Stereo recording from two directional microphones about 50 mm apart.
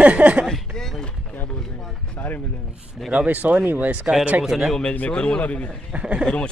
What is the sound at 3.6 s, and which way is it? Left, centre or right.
Speech, right.